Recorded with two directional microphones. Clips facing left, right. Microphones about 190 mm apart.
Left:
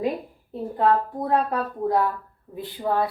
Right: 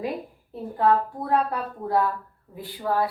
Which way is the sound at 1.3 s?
20° left (ahead or behind).